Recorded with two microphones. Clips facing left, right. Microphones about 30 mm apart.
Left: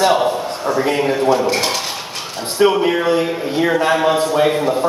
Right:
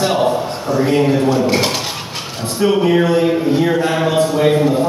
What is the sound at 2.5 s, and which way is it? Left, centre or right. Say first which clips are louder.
Speech: right 1 dB; left.